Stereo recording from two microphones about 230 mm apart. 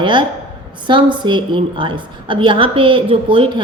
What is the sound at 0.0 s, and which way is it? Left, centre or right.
A woman's voice, right.